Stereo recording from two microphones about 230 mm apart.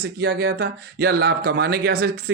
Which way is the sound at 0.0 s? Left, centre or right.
Right.